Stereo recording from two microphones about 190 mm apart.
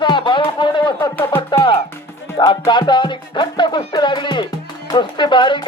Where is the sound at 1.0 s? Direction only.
10° left (ahead or behind).